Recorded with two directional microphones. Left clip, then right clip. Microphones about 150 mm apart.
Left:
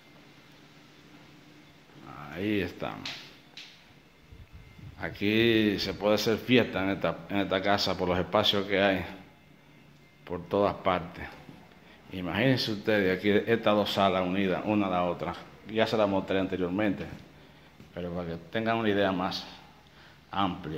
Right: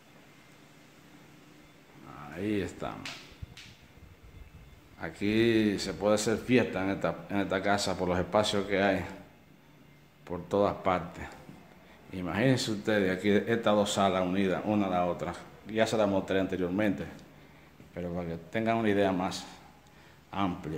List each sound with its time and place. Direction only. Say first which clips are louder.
2.3 s speech: left 2 dB; centre (ahead or behind)
4.9 s speech: left 2 dB; centre (ahead or behind)
10.2 s speech: left 1 dB; 10° right (ahead or behind)
17.9 s a man's voice: left 1 dB; 15° right (ahead or behind)